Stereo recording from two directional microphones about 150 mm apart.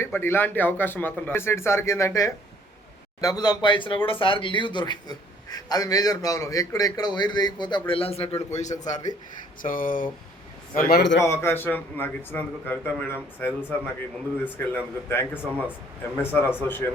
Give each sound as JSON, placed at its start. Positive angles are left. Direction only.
{"t": 0.0, "sound": "a man's voice", "side_deg": 15}
{"t": 8.4, "sound": "a man's voice", "side_deg": 50}
{"t": 9.6, "sound": "speech", "side_deg": 65}
{"t": 10.8, "sound": "a man's voice", "side_deg": 85}
{"t": 11.2, "sound": "a man's voice", "side_deg": 15}